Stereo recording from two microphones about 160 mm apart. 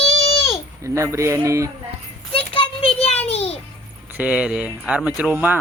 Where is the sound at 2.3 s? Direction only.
35° left (ahead or behind).